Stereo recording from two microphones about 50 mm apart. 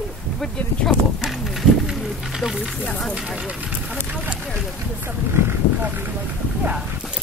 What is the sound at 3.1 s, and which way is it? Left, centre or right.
Speech, centre.